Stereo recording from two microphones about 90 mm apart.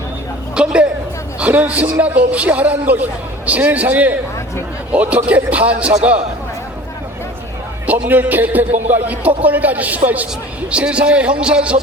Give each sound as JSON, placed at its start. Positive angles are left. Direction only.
{"t": 0.5, "sound": "chatter", "side_deg": -10}
{"t": 1.4, "sound": "a man's voice", "side_deg": -15}
{"t": 7.9, "sound": "a man's voice", "side_deg": -15}